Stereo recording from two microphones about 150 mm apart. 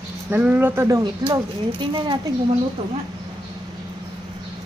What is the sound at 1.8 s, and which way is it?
Speech, 30° right (ahead or behind).